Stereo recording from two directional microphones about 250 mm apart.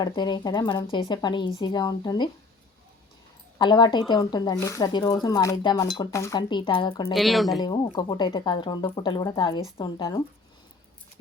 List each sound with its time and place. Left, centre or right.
0.0 s speech: centre
3.6 s speech: centre
7.1 s speech: centre
7.6 s speech: centre